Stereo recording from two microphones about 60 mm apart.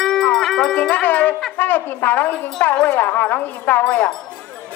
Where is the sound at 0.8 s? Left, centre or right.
Left.